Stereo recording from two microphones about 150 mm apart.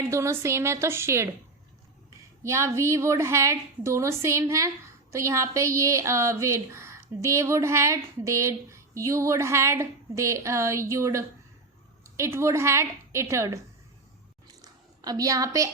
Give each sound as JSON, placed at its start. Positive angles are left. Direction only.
{"t": 0.0, "sound": "a woman's voice", "side_deg": -20}
{"t": 2.4, "sound": "speech", "side_deg": -20}
{"t": 14.4, "sound": "a sound", "side_deg": -25}